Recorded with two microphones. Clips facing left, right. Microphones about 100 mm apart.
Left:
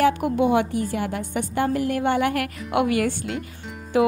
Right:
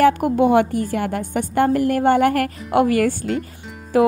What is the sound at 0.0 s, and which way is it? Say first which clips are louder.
A woman's voice: right 4 dB; 45° right (ahead or behind).